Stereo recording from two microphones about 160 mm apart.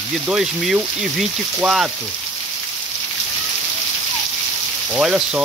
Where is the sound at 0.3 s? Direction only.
5° right (ahead or behind).